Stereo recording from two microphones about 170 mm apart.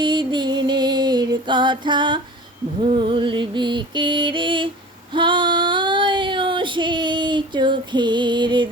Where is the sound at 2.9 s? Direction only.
30° right (ahead or behind).